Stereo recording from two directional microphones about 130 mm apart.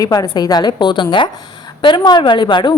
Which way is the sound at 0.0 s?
30° left (ahead or behind).